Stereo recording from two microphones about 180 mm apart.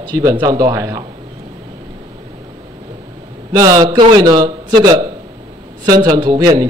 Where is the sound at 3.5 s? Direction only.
20° right (ahead or behind).